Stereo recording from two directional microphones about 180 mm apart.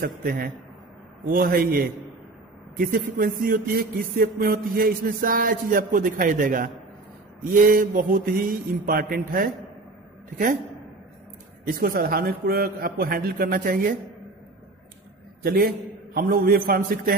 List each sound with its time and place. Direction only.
0.0 s a man's voice: 55° right (ahead or behind)
11.6 s speech: 50° right (ahead or behind)
15.4 s a man's voice: 55° right (ahead or behind)